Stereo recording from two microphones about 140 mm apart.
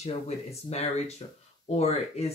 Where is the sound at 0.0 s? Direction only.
50° left (ahead or behind).